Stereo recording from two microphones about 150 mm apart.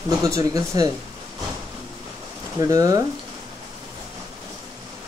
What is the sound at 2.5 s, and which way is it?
Speech, 25° right (ahead or behind).